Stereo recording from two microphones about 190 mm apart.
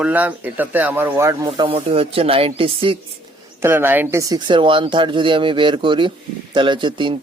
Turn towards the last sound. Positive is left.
turn(degrees=-25)  # may be behind; listen again after turning